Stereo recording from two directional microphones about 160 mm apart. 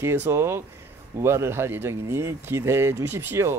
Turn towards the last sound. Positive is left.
turn(degrees=-15)  # may be behind; listen again after turning